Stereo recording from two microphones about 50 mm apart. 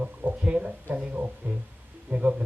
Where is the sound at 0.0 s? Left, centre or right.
Right.